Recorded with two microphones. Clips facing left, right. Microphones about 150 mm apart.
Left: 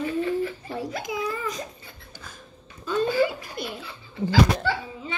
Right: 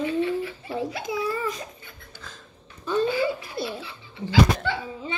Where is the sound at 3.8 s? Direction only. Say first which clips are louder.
Left 5 dB; 45° left (ahead or behind).